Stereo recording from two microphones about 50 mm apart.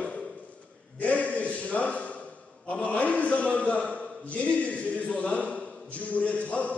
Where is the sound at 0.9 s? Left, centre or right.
Left.